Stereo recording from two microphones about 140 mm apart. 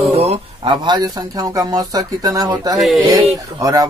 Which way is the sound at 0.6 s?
30° right (ahead or behind).